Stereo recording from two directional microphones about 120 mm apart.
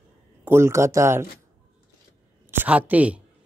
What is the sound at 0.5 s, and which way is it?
Speech, 20° right (ahead or behind).